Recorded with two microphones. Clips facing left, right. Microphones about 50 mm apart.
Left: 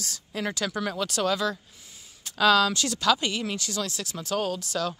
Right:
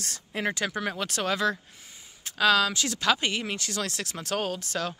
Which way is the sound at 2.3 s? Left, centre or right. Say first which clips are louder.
Left 2 dB; centre.